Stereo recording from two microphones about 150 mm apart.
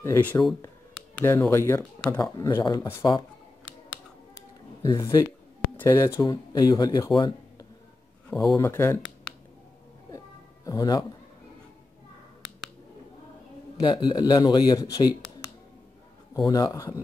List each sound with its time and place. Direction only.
0.0 s speech: 15° left (ahead or behind)
4.8 s speech: 25° left (ahead or behind)
7.2 s a sound: 30° left (ahead or behind)
8.5 s speech: 20° left (ahead or behind)
10.1 s music: 25° left (ahead or behind)
13.7 s speech: 30° left (ahead or behind)